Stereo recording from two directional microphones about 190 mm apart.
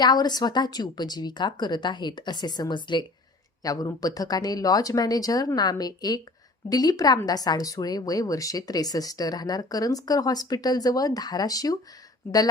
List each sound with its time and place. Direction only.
0.0 s a woman's voice: 20° left (ahead or behind)